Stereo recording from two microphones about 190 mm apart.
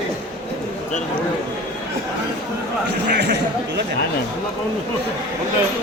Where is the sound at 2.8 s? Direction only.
65° right (ahead or behind).